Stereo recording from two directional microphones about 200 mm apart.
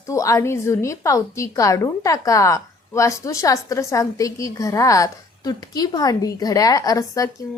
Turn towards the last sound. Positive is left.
turn(degrees=15)  # may be behind; listen again after turning